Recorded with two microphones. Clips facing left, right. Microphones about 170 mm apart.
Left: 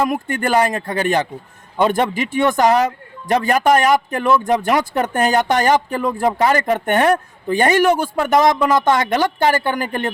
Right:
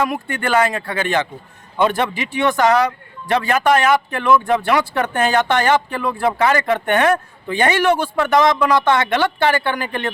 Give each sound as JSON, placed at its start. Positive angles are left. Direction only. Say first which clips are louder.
{"t": 0.1, "sound": "a man's voice", "louder": "left 1 dB", "side_deg": 45}